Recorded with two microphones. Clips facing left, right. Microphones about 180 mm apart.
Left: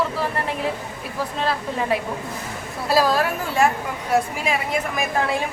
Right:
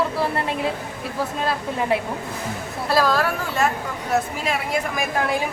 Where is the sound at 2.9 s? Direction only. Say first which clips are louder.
Left 1 dB; 15° left (ahead or behind).